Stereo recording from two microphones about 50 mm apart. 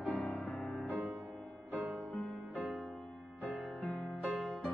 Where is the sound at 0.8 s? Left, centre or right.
Right.